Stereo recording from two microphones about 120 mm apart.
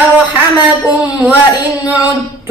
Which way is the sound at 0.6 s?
15° right (ahead or behind).